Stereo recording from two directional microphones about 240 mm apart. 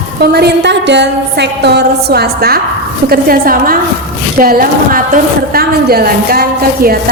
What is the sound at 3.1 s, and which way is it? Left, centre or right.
A woman's voice, right.